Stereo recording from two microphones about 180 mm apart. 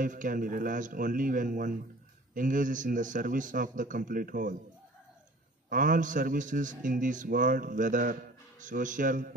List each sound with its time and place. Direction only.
0.0 s a man's voice: 45° right (ahead or behind)
5.7 s a man's voice: 45° right (ahead or behind)